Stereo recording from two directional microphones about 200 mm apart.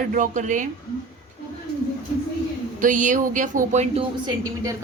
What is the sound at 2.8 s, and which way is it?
Speech, 40° right (ahead or behind).